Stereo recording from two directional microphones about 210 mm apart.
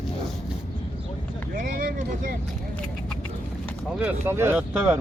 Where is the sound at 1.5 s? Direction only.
40° right (ahead or behind).